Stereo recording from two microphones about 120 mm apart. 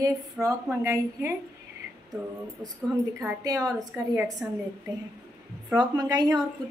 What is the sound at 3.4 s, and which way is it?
A woman's voice, 30° right (ahead or behind).